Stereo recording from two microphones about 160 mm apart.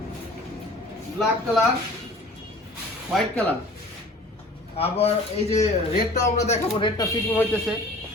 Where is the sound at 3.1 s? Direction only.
10° left (ahead or behind).